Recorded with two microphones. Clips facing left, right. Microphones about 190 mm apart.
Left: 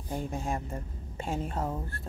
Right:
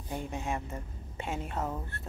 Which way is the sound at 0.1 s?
35° left (ahead or behind).